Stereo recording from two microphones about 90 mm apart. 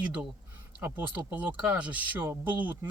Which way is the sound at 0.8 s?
20° right (ahead or behind).